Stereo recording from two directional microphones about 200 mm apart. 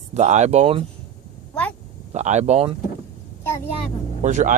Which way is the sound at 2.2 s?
35° right (ahead or behind).